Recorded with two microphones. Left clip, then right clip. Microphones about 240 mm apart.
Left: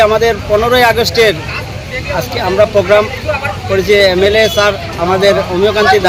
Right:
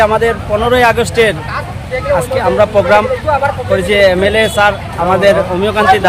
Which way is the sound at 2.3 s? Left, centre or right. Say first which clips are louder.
Left 2 dB; centre.